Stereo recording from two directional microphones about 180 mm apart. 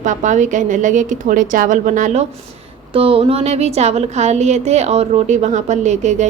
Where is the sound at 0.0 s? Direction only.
45° right (ahead or behind).